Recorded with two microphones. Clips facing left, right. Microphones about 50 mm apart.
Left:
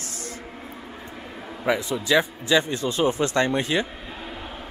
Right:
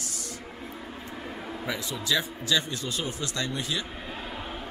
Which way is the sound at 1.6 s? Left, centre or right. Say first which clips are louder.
Left 8 dB; left.